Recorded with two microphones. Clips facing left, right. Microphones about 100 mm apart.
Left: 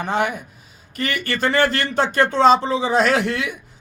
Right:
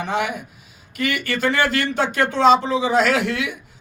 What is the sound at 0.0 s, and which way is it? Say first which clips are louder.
A man's voice: left 2 dB; 45° left (ahead or behind).